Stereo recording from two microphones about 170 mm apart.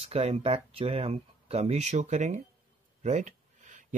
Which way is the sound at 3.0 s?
40° right (ahead or behind).